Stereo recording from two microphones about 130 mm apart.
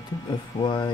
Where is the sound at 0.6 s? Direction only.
35° left (ahead or behind).